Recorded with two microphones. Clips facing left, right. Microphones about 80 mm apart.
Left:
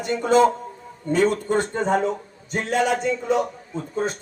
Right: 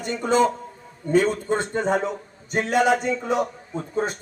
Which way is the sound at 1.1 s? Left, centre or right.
Right.